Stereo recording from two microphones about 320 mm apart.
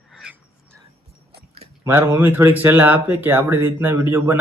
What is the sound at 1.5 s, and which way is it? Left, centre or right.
Speech, centre.